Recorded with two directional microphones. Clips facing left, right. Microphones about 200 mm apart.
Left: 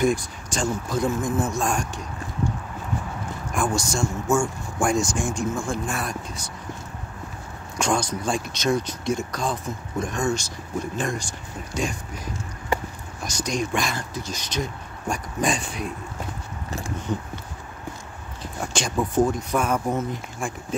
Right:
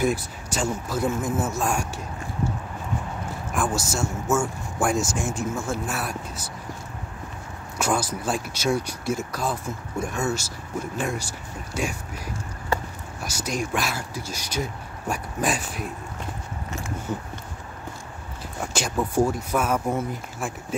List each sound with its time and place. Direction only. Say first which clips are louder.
0.0 s speech: left 2 dB; 5° right (ahead or behind)
3.5 s speech: left 1 dB; 5° right (ahead or behind)
7.7 s speech: left 1 dB; 5° right (ahead or behind)
12.7 s a sound: left 1 dB; 15° left (ahead or behind)
13.2 s speech: left 2 dB; 5° right (ahead or behind)
17.1 s speech: left 3 dB; 5° right (ahead or behind)
18.4 s speech: left 1 dB; 5° right (ahead or behind)